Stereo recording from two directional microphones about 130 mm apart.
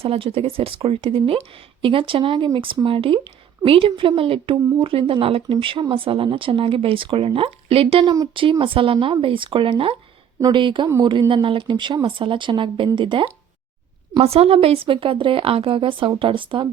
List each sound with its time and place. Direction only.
0.0 s speech: 45° right (ahead or behind)
10.8 s speech: 25° right (ahead or behind)
11.1 s speech: 40° right (ahead or behind)